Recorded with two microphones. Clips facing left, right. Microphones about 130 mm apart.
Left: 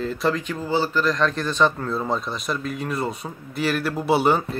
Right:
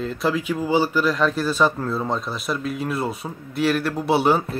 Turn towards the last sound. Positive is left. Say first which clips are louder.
# right 1 dB
turn(degrees=0)  # may be behind; listen again after turning